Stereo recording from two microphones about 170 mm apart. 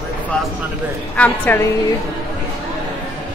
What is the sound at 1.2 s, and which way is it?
Speech, 10° left (ahead or behind).